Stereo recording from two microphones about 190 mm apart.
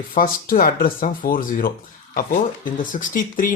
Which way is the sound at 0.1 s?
45° left (ahead or behind).